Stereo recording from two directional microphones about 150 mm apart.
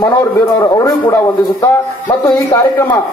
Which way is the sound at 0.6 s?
20° left (ahead or behind).